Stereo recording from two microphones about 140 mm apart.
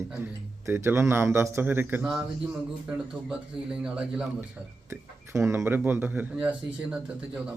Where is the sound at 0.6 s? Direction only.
15° right (ahead or behind).